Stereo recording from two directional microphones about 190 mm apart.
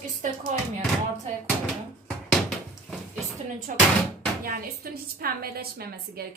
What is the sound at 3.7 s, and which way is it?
Speech, 45° right (ahead or behind).